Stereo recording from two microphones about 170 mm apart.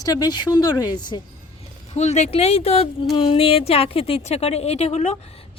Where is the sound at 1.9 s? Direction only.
40° left (ahead or behind).